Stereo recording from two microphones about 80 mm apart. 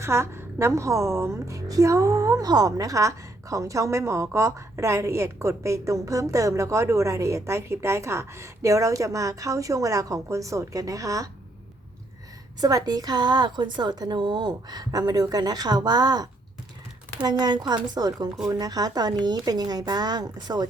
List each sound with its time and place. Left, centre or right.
0.0 s a woman's voice: right
12.5 s a woman's voice: right